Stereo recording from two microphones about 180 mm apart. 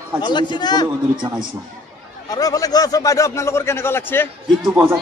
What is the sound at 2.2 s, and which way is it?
A man's voice, 20° left (ahead or behind).